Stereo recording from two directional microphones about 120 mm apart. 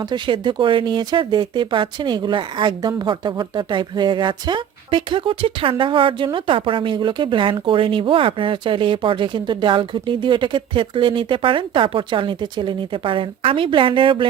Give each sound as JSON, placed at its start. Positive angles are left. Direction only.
{"t": 0.0, "sound": "speech", "side_deg": -40}